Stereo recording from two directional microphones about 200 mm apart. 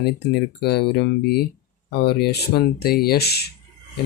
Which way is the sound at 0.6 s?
55° left (ahead or behind).